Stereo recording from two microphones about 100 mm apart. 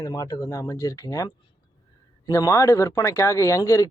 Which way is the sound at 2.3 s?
30° left (ahead or behind).